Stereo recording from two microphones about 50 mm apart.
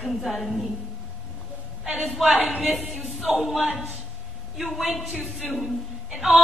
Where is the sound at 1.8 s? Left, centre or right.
Centre.